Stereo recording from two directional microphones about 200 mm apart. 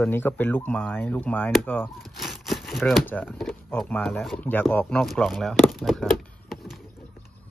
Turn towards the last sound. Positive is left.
turn(degrees=0)  # may be behind; listen again after turning